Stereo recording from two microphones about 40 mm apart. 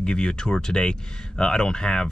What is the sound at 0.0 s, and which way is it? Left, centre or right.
Speech, left.